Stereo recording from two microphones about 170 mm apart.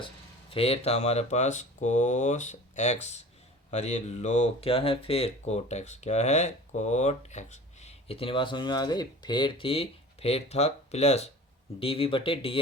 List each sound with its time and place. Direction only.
0.5 s speech: 35° left (ahead or behind)